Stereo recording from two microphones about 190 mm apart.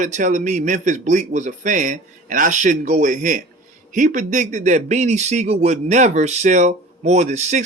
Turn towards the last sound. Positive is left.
turn(degrees=-40)  # may be behind; listen again after turning